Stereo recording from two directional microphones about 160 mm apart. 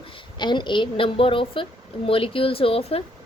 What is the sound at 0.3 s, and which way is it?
A woman's voice, 30° left (ahead or behind).